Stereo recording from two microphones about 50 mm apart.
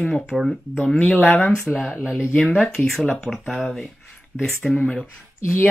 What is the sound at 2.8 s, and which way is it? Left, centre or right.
Speech, centre.